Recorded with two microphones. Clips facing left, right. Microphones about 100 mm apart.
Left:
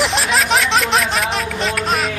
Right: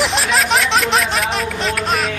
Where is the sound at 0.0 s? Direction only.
Centre (ahead or behind).